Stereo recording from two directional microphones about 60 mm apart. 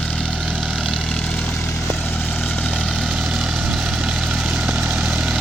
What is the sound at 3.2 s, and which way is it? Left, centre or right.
Vehicle, centre.